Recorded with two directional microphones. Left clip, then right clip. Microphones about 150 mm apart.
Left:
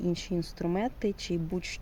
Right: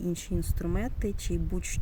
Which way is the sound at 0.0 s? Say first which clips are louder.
Left 2 dB; 30° right (ahead or behind).